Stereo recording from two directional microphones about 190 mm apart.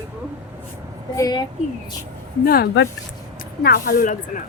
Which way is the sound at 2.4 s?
50° left (ahead or behind).